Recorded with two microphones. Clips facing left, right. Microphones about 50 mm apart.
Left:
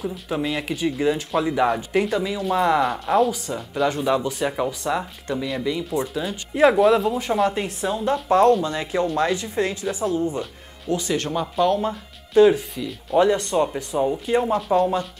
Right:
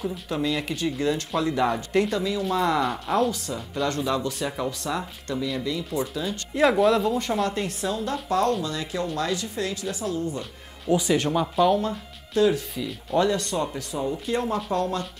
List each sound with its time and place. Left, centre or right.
0.4 s speech: centre
6.3 s speech: centre
10.9 s speech: centre
12.4 s speech: left
12.7 s speech: centre
13.2 s speech: left
14.2 s speech: centre